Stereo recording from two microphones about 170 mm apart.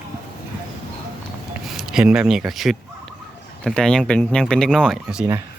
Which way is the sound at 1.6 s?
Centre (ahead or behind).